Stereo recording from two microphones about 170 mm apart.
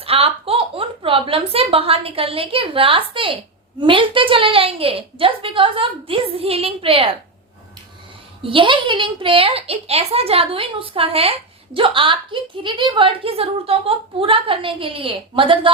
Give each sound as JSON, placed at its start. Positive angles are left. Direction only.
{"t": 0.0, "sound": "a woman's voice", "side_deg": -35}
{"t": 8.4, "sound": "a woman's voice", "side_deg": -30}